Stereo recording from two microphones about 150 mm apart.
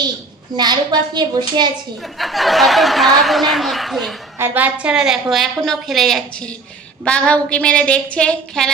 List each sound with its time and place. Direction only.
0.5 s a woman's voice: 30° right (ahead or behind)
2.0 s speech: centre (ahead or behind)
4.4 s a woman's voice: 15° right (ahead or behind); by 8.7 s 5° left (ahead or behind)